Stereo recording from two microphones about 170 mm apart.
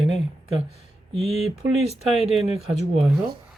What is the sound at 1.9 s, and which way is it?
Speech, 40° left (ahead or behind).